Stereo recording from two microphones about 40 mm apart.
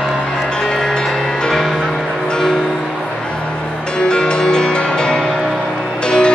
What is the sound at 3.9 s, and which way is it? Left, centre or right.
Music, left.